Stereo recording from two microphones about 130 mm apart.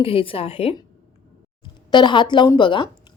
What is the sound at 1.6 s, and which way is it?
A woman's voice, 35° left (ahead or behind).